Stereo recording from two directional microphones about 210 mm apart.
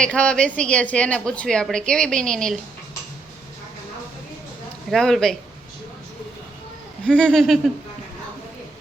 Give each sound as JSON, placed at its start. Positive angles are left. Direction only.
{"t": 0.0, "sound": "a woman's voice", "side_deg": 5}
{"t": 4.9, "sound": "a woman's voice", "side_deg": 0}
{"t": 7.1, "sound": "a woman's voice", "side_deg": 5}